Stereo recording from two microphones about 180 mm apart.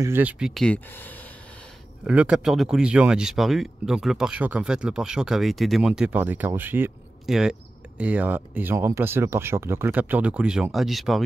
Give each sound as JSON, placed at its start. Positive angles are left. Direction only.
{"t": 0.0, "sound": "speech", "side_deg": -10}
{"t": 0.6, "sound": "speech", "side_deg": 10}
{"t": 2.0, "sound": "speech", "side_deg": -5}